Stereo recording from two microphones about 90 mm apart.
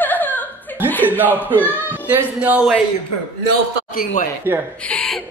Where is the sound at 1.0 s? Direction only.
20° right (ahead or behind).